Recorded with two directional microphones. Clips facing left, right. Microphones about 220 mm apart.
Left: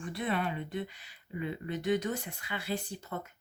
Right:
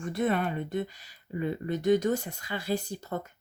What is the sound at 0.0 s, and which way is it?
Speech, 45° right (ahead or behind).